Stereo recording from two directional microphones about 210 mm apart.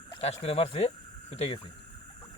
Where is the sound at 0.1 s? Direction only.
25° left (ahead or behind).